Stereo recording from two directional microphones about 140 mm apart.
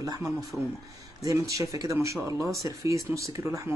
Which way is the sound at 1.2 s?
25° right (ahead or behind).